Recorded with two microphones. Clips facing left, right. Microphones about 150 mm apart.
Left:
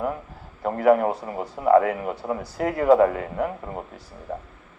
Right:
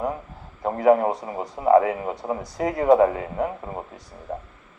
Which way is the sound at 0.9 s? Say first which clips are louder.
Right 1 dB; 25° right (ahead or behind).